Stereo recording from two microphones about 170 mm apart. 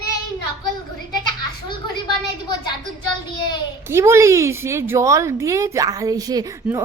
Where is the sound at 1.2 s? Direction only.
25° left (ahead or behind).